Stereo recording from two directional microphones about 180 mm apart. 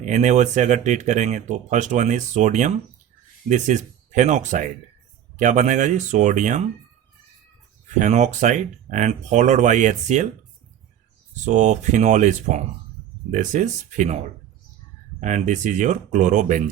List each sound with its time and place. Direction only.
0.0 s speech: 40° right (ahead or behind)
7.9 s speech: 40° right (ahead or behind)
11.4 s speech: 40° right (ahead or behind)
15.2 s speech: 40° right (ahead or behind)